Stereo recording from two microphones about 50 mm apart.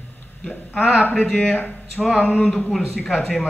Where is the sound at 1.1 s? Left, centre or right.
Centre.